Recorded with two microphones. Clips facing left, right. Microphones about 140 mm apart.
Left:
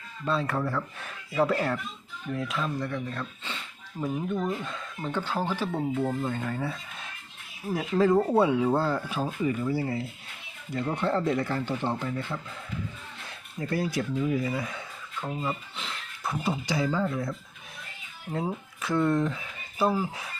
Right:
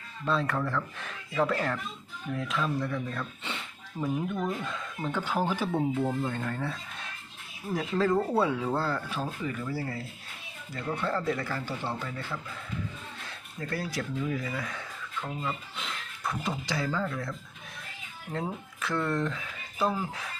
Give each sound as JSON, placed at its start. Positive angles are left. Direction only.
{"t": 0.3, "sound": "speech", "side_deg": 5}
{"t": 13.6, "sound": "speech", "side_deg": 15}